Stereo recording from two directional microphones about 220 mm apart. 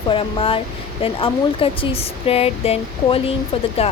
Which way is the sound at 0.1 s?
25° left (ahead or behind).